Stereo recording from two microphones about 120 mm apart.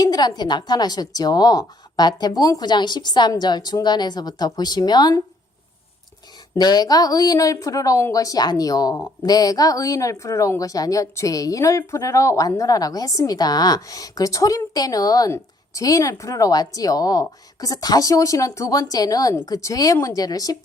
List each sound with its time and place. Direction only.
0.0 s speech: 30° left (ahead or behind)
6.6 s a woman's voice: 35° left (ahead or behind)